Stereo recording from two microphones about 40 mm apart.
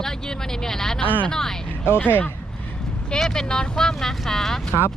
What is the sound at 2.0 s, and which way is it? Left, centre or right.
Speech, left.